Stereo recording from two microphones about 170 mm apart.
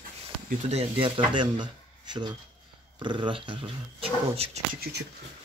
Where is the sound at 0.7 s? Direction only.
35° right (ahead or behind).